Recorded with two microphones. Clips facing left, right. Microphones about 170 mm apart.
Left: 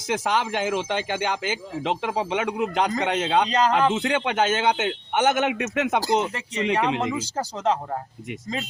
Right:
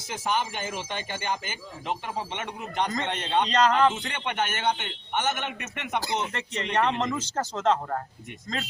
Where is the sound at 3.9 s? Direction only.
90° left.